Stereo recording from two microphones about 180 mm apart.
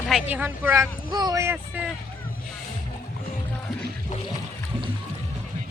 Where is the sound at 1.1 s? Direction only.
20° right (ahead or behind).